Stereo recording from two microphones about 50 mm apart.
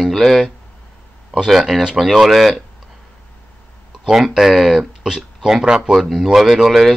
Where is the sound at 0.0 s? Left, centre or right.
Centre.